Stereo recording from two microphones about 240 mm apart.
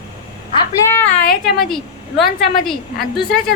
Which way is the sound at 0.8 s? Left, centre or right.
Centre.